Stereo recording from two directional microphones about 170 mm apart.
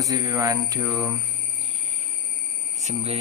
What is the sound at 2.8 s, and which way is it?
Speech, 40° right (ahead or behind).